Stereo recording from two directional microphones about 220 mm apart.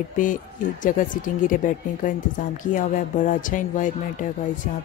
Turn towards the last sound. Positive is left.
turn(degrees=35)  # may be behind; listen again after turning